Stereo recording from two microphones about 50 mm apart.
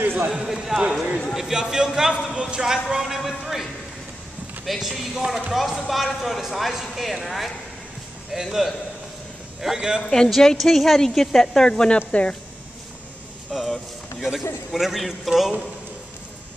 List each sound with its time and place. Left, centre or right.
0.0 s run: right
0.3 s speech: centre
4.6 s speech: centre
10.0 s speech: centre
13.5 s speech: centre